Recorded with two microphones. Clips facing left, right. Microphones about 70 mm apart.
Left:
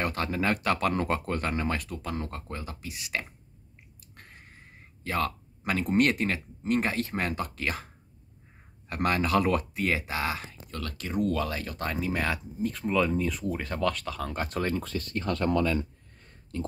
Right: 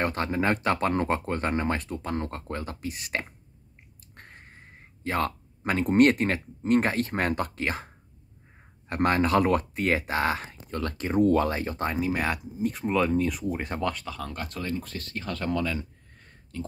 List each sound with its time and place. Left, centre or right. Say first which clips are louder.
0.0 s speech: right 2 dB; right
12.0 s speech: even; centre
13.7 s speech: left 3 dB; right
13.9 s speech: left 2 dB; centre
14.3 s speech: left 4 dB; left